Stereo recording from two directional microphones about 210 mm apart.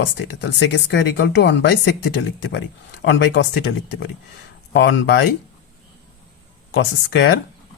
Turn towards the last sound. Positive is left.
turn(degrees=55)  # may be behind; listen again after turning